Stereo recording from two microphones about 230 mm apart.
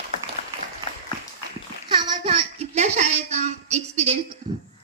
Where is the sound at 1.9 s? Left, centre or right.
Right.